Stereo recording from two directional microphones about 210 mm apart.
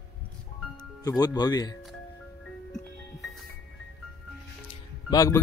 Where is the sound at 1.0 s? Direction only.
20° left (ahead or behind).